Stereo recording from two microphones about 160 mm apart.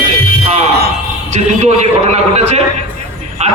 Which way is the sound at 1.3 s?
45° right (ahead or behind).